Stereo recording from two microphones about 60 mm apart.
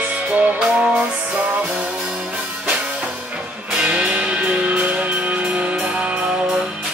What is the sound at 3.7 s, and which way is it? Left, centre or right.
Music, centre.